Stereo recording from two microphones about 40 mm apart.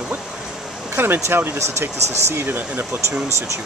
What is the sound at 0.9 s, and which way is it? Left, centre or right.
Speech, right.